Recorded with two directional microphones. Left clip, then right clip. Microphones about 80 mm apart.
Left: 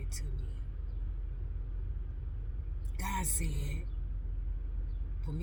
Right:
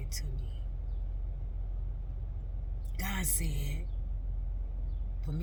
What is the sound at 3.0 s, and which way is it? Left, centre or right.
Music, right.